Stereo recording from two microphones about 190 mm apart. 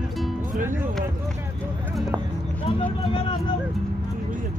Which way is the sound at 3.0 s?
25° left (ahead or behind).